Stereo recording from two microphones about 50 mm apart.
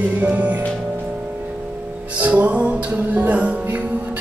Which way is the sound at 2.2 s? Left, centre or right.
Right.